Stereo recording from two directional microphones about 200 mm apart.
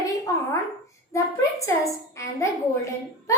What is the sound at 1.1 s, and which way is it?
A child's voice, 15° left (ahead or behind).